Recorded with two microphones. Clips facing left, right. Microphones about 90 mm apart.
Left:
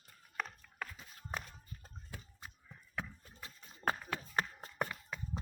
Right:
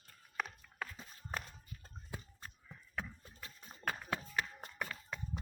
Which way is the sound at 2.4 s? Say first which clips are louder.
Even; 5° left (ahead or behind).